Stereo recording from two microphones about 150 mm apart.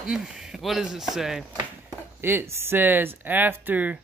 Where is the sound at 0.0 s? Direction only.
5° right (ahead or behind).